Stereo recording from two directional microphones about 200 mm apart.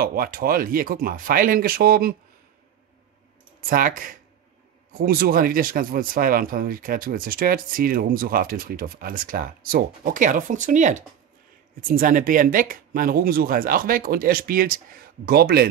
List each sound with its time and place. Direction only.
0.0 s speech: 45° right (ahead or behind)
3.6 s speech: 45° right (ahead or behind)